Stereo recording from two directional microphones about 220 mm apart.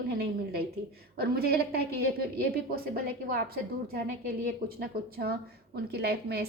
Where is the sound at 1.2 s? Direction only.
45° right (ahead or behind).